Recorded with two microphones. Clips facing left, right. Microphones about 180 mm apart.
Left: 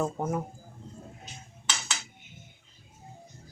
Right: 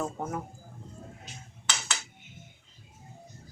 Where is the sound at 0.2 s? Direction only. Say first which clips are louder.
Left 4 dB; 15° left (ahead or behind).